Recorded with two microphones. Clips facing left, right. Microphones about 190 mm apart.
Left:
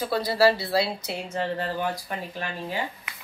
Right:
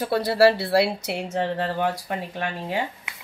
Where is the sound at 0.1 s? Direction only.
65° right (ahead or behind).